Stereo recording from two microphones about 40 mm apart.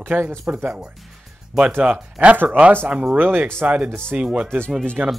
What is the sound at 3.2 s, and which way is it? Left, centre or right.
Speech, right.